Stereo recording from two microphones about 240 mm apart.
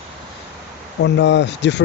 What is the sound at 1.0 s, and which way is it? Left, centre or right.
Speech, left.